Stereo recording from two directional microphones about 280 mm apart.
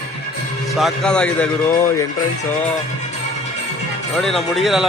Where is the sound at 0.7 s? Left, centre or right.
Centre.